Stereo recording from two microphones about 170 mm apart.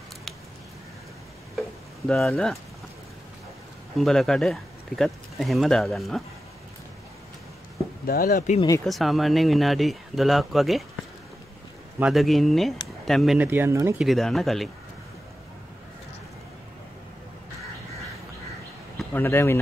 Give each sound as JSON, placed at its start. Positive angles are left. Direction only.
{"t": 2.0, "sound": "speech", "side_deg": 5}
{"t": 4.0, "sound": "speech", "side_deg": 0}
{"t": 8.1, "sound": "speech", "side_deg": 55}
{"t": 8.8, "sound": "speech", "side_deg": 0}
{"t": 12.0, "sound": "speech", "side_deg": 0}
{"t": 12.8, "sound": "a sound", "side_deg": 0}
{"t": 13.5, "sound": "speech", "side_deg": -15}
{"t": 13.9, "sound": "speech", "side_deg": 0}
{"t": 19.1, "sound": "speech", "side_deg": 15}